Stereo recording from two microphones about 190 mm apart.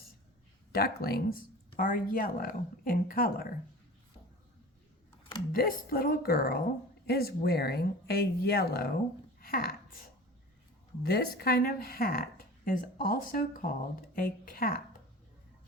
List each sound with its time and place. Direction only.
0.7 s speech: 55° left (ahead or behind)
5.5 s speech: 50° left (ahead or behind)
11.0 s speech: 55° left (ahead or behind)